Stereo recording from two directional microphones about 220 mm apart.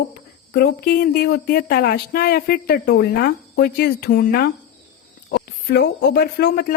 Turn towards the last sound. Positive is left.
turn(degrees=45)  # may be behind; listen again after turning